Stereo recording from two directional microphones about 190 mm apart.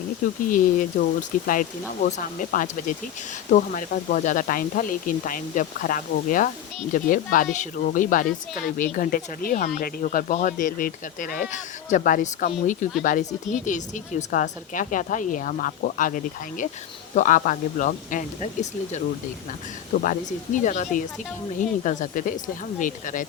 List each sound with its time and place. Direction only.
0.4 s speech: 45° left (ahead or behind)